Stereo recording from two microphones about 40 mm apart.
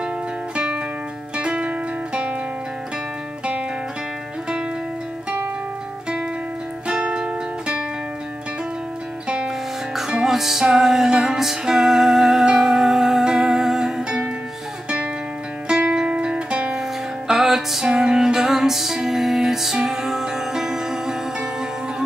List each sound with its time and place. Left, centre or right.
1.3 s music: right
6.9 s music: right
9.9 s music: centre
15.9 s music: right
17.4 s music: centre
17.8 s music: right